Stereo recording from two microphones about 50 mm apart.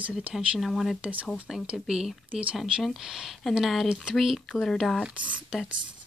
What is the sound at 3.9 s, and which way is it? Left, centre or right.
Speech, centre.